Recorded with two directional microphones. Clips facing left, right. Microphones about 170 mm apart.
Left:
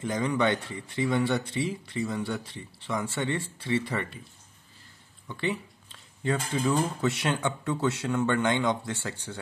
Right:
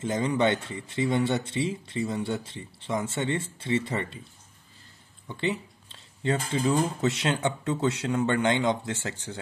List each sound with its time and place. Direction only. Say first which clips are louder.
0.0 s speech: right 2 dB; 25° right (ahead or behind)
5.4 s speech: right 1 dB; 25° right (ahead or behind)